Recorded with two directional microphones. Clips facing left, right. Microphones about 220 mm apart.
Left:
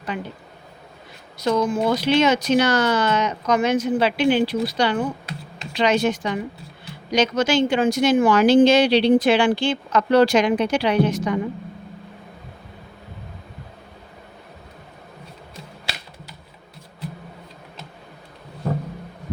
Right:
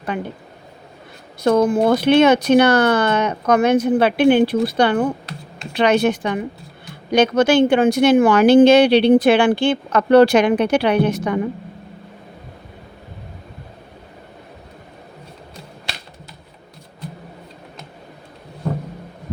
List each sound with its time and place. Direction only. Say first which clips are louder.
1.4 s speech: right 5 dB; 55° right (ahead or behind)